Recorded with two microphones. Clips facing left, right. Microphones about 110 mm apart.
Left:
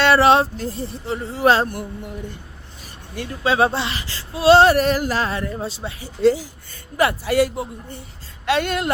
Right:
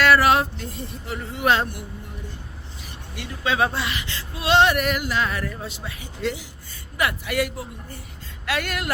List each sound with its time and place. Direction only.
0.0 s speech: 30° left (ahead or behind)
3.2 s speech: 30° left (ahead or behind)